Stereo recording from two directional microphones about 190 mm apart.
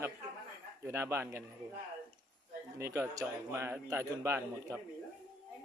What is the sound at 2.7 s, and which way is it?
Speech, 15° right (ahead or behind).